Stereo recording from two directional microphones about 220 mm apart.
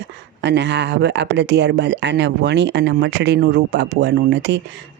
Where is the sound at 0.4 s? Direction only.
50° right (ahead or behind).